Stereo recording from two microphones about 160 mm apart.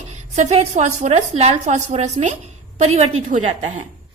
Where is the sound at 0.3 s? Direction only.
40° right (ahead or behind).